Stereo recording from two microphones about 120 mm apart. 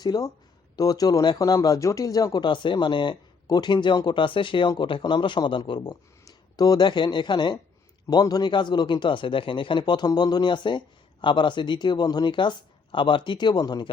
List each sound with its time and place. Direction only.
0.0 s a man's voice: 35° left (ahead or behind)